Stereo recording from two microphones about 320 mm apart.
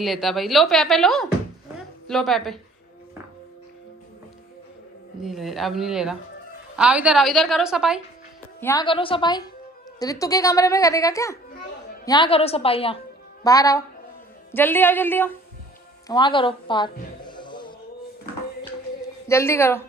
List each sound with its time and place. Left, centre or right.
0.0 s speech: centre
5.2 s speech: centre
8.5 s a child's voice: centre
19.2 s a child's voice: centre